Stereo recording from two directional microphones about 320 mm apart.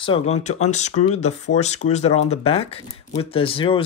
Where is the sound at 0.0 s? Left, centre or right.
Centre.